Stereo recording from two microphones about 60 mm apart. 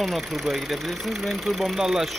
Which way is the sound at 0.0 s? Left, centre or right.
Centre.